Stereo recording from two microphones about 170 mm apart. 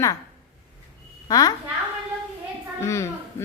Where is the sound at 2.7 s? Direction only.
15° left (ahead or behind).